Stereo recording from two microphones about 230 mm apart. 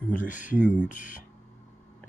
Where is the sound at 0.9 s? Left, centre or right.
Left.